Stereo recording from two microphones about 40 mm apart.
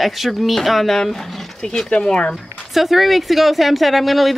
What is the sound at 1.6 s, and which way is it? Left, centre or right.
Speech, centre.